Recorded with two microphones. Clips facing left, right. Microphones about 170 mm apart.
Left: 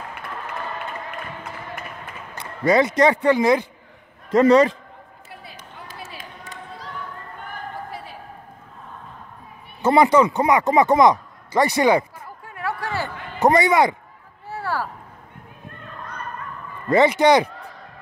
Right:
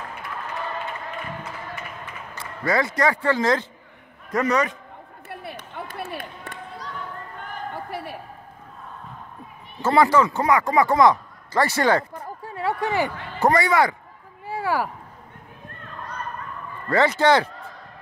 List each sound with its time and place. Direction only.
2.3 s speech: 20° left (ahead or behind)
4.3 s speech: 30° left (ahead or behind)
5.3 s run: 60° right (ahead or behind)
7.7 s a sound: 65° right (ahead or behind)
9.8 s speech: 20° left (ahead or behind)
12.4 s a sound: 25° right (ahead or behind)
13.4 s speech: 20° left (ahead or behind)
14.5 s a sound: 10° right (ahead or behind)
16.9 s speech: 15° left (ahead or behind)